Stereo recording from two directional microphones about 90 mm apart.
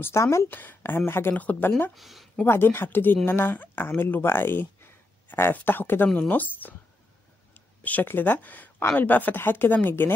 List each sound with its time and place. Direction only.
0.0 s speech: 30° left (ahead or behind)
0.5 s speech: 20° left (ahead or behind)
2.0 s speech: centre (ahead or behind)
2.3 s speech: 25° left (ahead or behind)
7.8 s speech: 20° left (ahead or behind)